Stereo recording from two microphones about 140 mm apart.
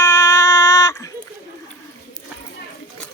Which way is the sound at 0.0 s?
25° left (ahead or behind).